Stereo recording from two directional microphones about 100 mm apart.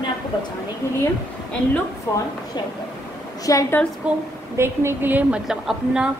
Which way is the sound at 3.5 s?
35° left (ahead or behind).